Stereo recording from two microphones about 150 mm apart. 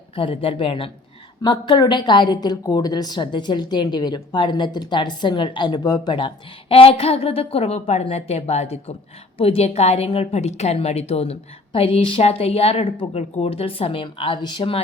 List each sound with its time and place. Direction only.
0.2 s a woman's voice: 40° left (ahead or behind)